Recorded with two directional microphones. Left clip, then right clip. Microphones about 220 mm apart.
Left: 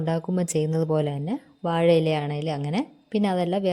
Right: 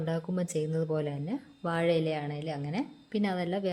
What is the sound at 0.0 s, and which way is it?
Speech, 30° left (ahead or behind).